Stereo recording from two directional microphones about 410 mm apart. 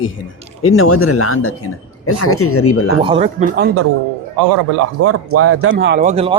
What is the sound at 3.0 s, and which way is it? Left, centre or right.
Speech, centre.